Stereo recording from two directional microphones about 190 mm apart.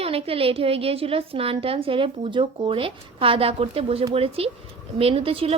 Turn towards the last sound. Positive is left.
turn(degrees=-30)  # may be behind; listen again after turning